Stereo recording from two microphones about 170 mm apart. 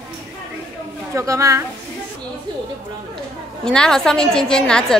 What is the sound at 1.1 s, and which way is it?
Speech, 15° right (ahead or behind).